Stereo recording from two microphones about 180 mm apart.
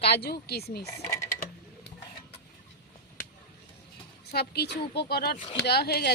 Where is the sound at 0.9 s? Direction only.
15° left (ahead or behind).